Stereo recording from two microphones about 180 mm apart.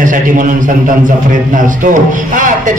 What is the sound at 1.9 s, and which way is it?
Speech, 45° right (ahead or behind).